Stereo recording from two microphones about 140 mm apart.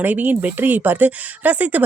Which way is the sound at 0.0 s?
15° right (ahead or behind).